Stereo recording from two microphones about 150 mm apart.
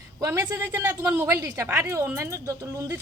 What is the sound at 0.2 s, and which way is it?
A woman's voice, 20° right (ahead or behind).